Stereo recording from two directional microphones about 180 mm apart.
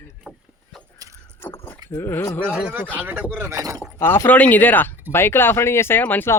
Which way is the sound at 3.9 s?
15° left (ahead or behind).